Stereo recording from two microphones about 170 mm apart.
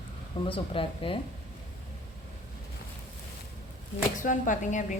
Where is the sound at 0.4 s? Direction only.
30° left (ahead or behind).